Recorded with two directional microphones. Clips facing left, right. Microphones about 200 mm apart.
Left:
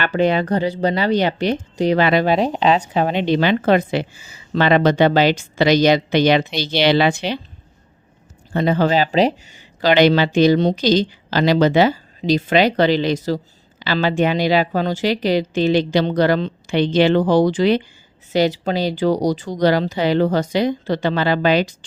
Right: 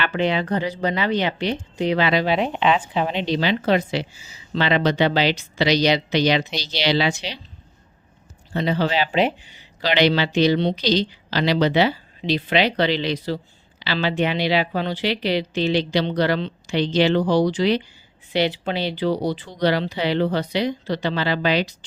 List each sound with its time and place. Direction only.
0.0 s speech: 45° left (ahead or behind)
8.5 s speech: 50° left (ahead or behind)